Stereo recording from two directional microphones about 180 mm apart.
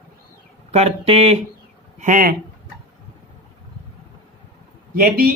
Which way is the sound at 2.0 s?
45° right (ahead or behind).